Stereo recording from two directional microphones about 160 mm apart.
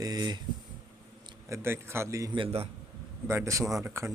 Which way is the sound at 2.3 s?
35° right (ahead or behind).